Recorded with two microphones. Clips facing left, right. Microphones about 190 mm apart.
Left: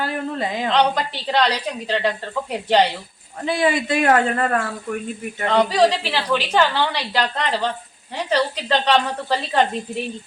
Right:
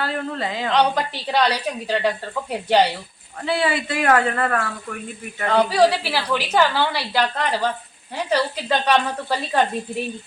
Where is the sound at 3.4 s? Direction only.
15° left (ahead or behind).